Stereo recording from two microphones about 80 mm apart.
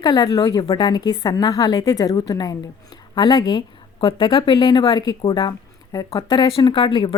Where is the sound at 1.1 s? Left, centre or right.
Left.